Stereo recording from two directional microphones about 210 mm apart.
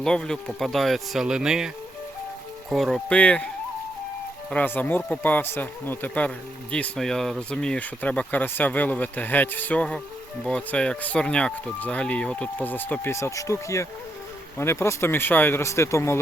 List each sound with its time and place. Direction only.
0.0 s speech: 5° left (ahead or behind)